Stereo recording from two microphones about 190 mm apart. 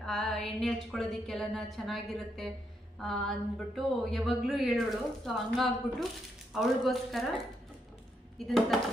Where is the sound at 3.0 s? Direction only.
Centre (ahead or behind).